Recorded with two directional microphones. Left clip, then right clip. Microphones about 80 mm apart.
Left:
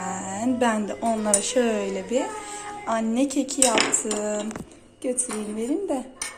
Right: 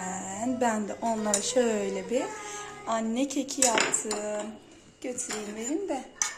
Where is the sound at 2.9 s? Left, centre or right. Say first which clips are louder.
Left 5 dB; right.